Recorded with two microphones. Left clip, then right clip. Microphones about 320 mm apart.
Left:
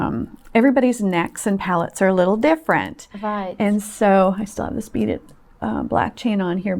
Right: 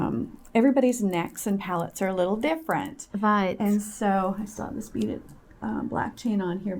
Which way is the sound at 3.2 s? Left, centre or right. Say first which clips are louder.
Right 1 dB; right.